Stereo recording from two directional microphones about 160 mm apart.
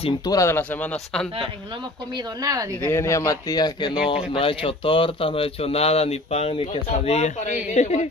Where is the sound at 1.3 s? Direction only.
30° right (ahead or behind).